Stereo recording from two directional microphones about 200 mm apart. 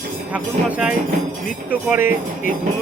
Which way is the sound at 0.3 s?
5° right (ahead or behind).